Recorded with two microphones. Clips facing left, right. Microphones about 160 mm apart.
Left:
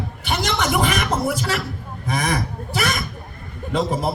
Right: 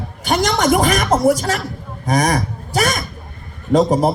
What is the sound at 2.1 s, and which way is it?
A man's voice, 40° right (ahead or behind).